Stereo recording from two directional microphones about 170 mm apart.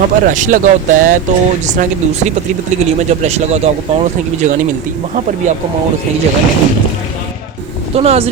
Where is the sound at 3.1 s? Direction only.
40° right (ahead or behind).